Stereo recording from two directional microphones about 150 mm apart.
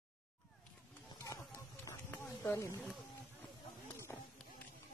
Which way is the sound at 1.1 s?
20° left (ahead or behind).